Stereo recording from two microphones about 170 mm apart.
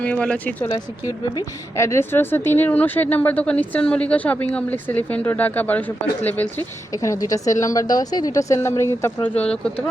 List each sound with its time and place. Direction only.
0.0 s a woman's voice: 5° left (ahead or behind)
0.7 s a woman's voice: 20° left (ahead or behind)